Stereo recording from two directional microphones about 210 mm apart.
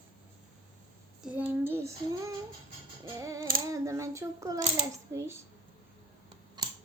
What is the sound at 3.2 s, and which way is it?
Female singing, 15° right (ahead or behind).